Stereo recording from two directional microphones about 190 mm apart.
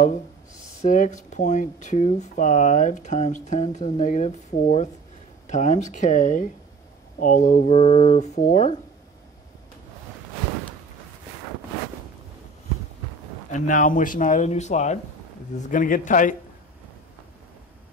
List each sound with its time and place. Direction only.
0.8 s speech: 45° left (ahead or behind)
13.5 s speech: 40° left (ahead or behind)